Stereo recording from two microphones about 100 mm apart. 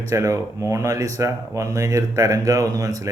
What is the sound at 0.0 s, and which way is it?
Speech, 30° right (ahead or behind).